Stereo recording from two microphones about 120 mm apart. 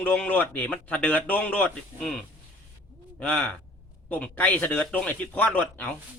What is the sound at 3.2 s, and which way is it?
A man's voice, 10° left (ahead or behind).